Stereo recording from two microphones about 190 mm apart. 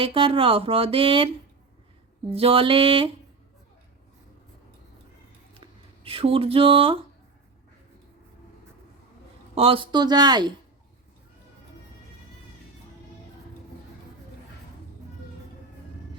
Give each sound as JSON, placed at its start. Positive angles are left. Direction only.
{"t": 0.0, "sound": "speech", "side_deg": -30}
{"t": 2.3, "sound": "speech", "side_deg": -30}
{"t": 5.5, "sound": "speech", "side_deg": -30}
{"t": 9.6, "sound": "speech", "side_deg": -30}